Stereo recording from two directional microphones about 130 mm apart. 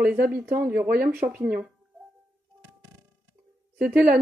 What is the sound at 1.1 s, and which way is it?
Speech, 10° right (ahead or behind).